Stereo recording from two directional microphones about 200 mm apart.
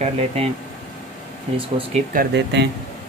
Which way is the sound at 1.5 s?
25° right (ahead or behind).